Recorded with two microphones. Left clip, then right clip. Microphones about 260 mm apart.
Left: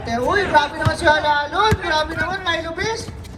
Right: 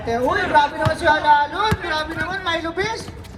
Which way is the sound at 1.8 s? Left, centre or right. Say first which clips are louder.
Left 3 dB; centre.